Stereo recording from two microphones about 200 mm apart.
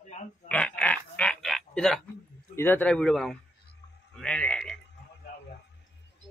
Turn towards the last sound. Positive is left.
turn(degrees=5)  # may be behind; listen again after turning